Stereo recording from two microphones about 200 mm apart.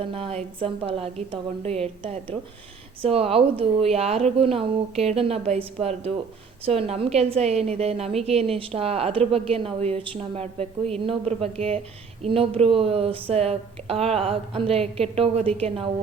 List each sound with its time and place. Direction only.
0.0 s a woman's voice: 30° right (ahead or behind)